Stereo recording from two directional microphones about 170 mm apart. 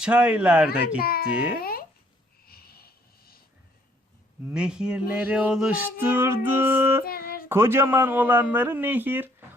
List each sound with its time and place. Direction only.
0.0 s speech: 5° right (ahead or behind)
1.0 s a child's voice: 60° left (ahead or behind)
2.5 s a sound: 65° left (ahead or behind)
4.4 s speech: 5° right (ahead or behind)
7.0 s speech: 60° left (ahead or behind)
7.4 s speech: 15° right (ahead or behind)